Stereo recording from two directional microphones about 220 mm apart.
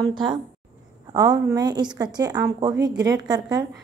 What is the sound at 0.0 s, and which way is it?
A woman's voice, 20° right (ahead or behind).